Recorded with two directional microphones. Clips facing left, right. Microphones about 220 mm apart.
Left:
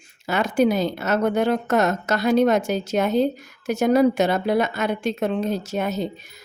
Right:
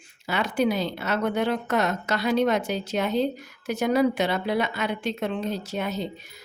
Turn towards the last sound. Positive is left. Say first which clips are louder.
# left 4 dB
turn(degrees=45)  # may be behind; listen again after turning